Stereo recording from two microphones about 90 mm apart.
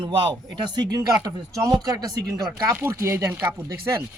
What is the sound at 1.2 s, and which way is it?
Speech, 40° right (ahead or behind).